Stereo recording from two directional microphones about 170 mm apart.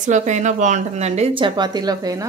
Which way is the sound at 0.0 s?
45° right (ahead or behind).